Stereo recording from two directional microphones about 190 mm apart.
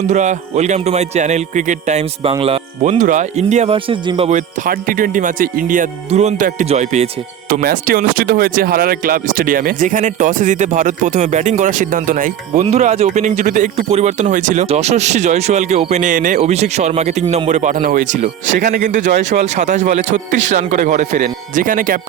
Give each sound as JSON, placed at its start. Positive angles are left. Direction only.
{"t": 0.1, "sound": "speech", "side_deg": -40}
{"t": 4.3, "sound": "speech", "side_deg": -40}
{"t": 7.5, "sound": "speech", "side_deg": -50}